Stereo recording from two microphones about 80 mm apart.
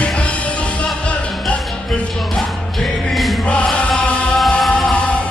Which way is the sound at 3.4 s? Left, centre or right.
Centre.